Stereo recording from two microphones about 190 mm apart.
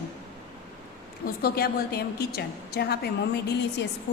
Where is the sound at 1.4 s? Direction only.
55° left (ahead or behind).